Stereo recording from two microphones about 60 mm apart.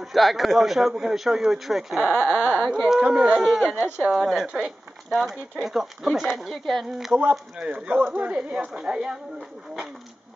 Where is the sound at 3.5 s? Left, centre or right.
Centre.